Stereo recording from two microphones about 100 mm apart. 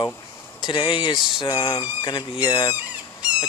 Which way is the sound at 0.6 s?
55° left (ahead or behind).